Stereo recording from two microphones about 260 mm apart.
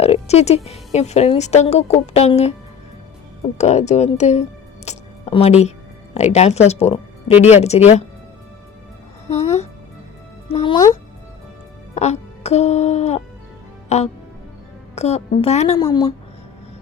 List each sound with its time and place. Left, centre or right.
0.0 s music: left
0.9 s a woman's voice: left
3.6 s a woman's voice: left
4.9 s a sound: left
6.1 s a woman's voice: left
10.5 s speech: centre
11.9 s a woman's voice: left